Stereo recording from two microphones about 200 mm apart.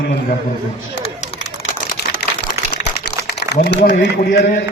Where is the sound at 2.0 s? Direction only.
55° left (ahead or behind).